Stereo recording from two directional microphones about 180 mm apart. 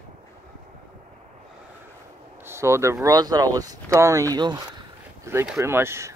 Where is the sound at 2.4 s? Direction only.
15° right (ahead or behind).